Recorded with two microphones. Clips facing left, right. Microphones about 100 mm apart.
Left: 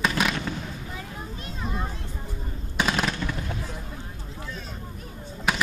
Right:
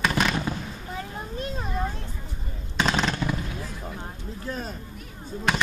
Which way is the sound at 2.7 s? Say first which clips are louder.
Right 1 dB; 5° left (ahead or behind).